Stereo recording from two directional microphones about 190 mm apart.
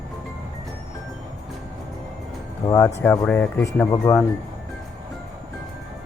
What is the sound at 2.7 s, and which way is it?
Speech, 15° left (ahead or behind).